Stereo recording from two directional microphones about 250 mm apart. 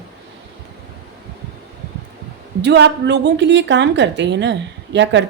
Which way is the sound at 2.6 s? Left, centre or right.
Right.